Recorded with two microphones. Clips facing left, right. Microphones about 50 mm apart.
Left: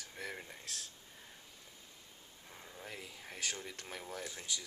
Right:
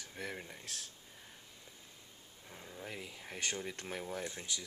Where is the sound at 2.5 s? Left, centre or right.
Centre.